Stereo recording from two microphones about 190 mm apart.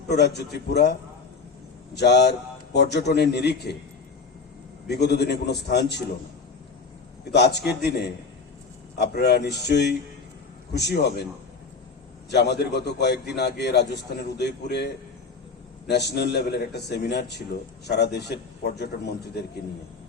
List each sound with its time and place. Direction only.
0.1 s a man's voice: 60° left (ahead or behind)
2.0 s a man's voice: 60° left (ahead or behind)
4.9 s a man's voice: 60° left (ahead or behind)
7.3 s a man's voice: 60° left (ahead or behind)
12.3 s a man's voice: 60° left (ahead or behind)
15.9 s a man's voice: 60° left (ahead or behind)